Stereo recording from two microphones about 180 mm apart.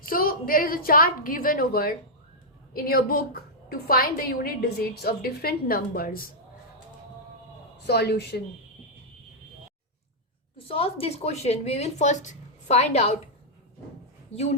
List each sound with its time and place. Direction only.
0.1 s a woman's voice: 55° left (ahead or behind)
7.9 s a woman's voice: 65° left (ahead or behind)
10.7 s speech: 35° left (ahead or behind)